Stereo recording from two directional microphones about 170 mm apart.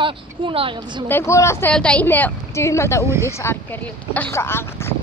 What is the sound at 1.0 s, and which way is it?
A woman's voice, 15° left (ahead or behind).